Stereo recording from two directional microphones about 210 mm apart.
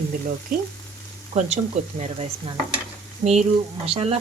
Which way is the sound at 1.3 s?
35° right (ahead or behind).